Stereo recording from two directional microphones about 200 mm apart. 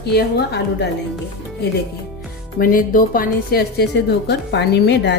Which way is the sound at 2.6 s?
45° left (ahead or behind).